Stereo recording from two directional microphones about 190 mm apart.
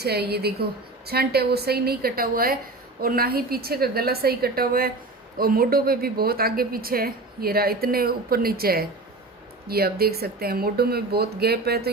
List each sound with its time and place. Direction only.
0.0 s a woman's voice: 55° right (ahead or behind)